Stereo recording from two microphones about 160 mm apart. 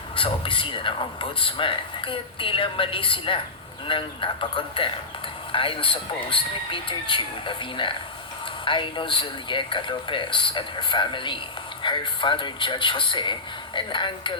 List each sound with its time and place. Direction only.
0.2 s speech: 35° left (ahead or behind)